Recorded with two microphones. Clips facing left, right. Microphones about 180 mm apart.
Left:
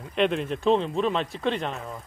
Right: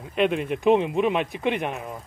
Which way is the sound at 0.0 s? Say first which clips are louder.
Right 1 dB; 5° right (ahead or behind).